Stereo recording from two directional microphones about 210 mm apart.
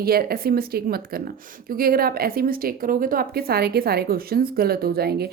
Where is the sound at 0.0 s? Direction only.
45° right (ahead or behind).